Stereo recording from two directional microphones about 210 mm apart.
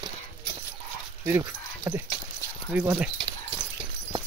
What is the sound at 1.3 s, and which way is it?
Speech, 10° right (ahead or behind).